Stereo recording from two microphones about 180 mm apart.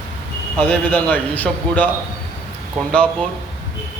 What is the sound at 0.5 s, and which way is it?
A man's voice, 5° left (ahead or behind).